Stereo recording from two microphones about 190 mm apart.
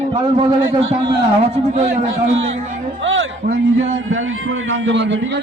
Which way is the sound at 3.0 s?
90° right.